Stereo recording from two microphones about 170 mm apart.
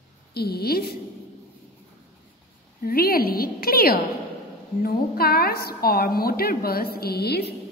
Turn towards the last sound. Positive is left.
turn(degrees=70)  # may be behind; listen again after turning